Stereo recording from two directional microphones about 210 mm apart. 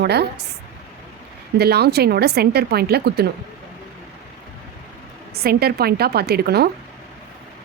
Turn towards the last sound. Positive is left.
turn(degrees=-50)  # may be behind; listen again after turning